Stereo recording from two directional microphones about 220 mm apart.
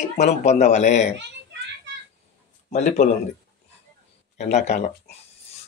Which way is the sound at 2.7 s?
30° left (ahead or behind).